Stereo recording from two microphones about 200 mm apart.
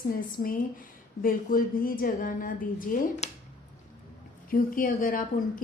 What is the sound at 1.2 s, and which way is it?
A woman's voice, 45° left (ahead or behind).